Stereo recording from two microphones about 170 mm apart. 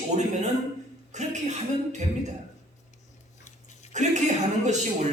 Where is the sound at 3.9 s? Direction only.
45° right (ahead or behind).